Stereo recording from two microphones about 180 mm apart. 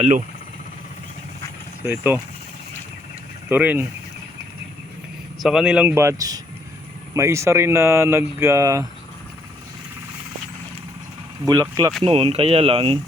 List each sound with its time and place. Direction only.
1.8 s speech: 10° right (ahead or behind)
3.5 s speech: 10° right (ahead or behind)
5.4 s speech: 5° right (ahead or behind); by 8.9 s 20° right (ahead or behind)
11.4 s speech: 20° right (ahead or behind)
12.0 s speech: 30° right (ahead or behind)